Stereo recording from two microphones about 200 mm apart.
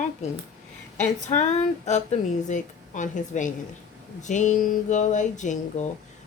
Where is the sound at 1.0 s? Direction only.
35° left (ahead or behind).